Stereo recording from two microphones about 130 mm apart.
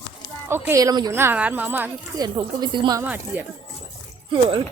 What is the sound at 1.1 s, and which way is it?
Speech, 15° right (ahead or behind).